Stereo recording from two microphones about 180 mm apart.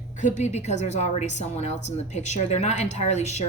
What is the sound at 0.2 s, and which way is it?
Speech, 40° left (ahead or behind).